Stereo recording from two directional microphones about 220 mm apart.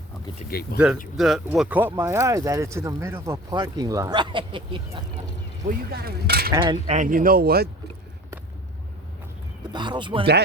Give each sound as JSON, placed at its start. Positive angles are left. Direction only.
{"t": 0.6, "sound": "speech", "side_deg": 45}
{"t": 1.1, "sound": "speech", "side_deg": 0}
{"t": 5.9, "sound": "speech", "side_deg": -45}
{"t": 6.5, "sound": "speech", "side_deg": -20}
{"t": 6.8, "sound": "speech", "side_deg": -35}
{"t": 9.7, "sound": "speech", "side_deg": -20}